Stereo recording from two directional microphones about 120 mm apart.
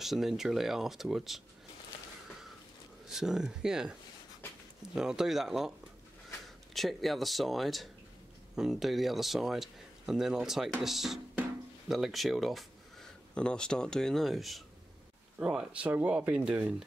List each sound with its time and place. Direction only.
0.0 s speech: centre (ahead or behind)
3.1 s speech: 5° right (ahead or behind)
4.9 s speech: 5° right (ahead or behind)